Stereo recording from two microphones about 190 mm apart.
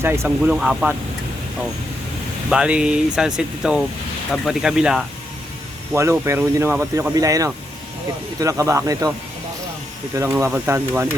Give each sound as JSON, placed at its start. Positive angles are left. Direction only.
{"t": 0.0, "sound": "speech", "side_deg": -10}
{"t": 2.5, "sound": "speech", "side_deg": -5}
{"t": 5.9, "sound": "speech", "side_deg": -15}
{"t": 10.2, "sound": "speech", "side_deg": -10}